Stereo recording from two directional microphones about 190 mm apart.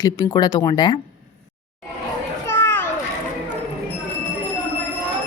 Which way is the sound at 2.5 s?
10° left (ahead or behind).